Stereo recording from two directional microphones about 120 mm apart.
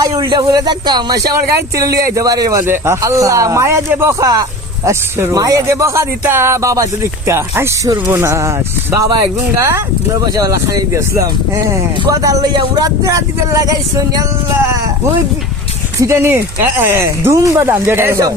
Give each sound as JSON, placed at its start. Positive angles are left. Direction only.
{"t": 0.0, "sound": "a man's voice", "side_deg": -35}
{"t": 16.0, "sound": "speech", "side_deg": -25}